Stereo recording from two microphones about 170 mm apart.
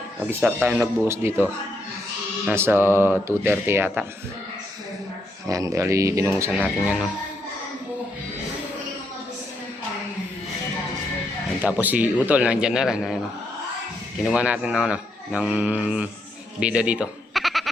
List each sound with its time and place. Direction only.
0.3 s speech: 10° right (ahead or behind)
2.5 s speech: 15° right (ahead or behind)
5.5 s speech: 20° right (ahead or behind)
6.6 s speech: centre (ahead or behind)
11.6 s speech: 10° right (ahead or behind)
14.3 s speech: 5° right (ahead or behind)
16.6 s bleat: 5° right (ahead or behind)